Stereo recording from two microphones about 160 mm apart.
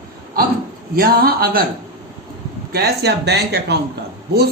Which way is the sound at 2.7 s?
80° right.